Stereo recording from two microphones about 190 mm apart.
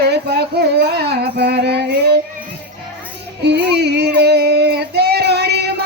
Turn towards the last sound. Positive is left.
turn(degrees=-60)  # may be behind; listen again after turning